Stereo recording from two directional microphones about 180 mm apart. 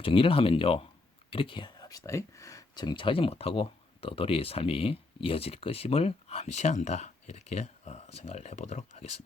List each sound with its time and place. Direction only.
0.0 s speech: 30° left (ahead or behind)